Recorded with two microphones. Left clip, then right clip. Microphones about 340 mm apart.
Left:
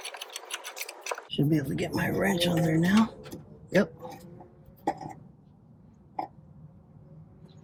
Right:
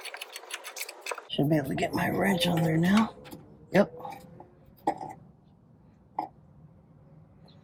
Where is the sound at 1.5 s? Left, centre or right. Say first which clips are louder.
Right 2 dB; centre.